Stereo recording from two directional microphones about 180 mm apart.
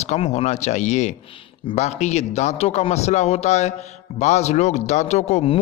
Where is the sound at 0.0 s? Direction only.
40° left (ahead or behind).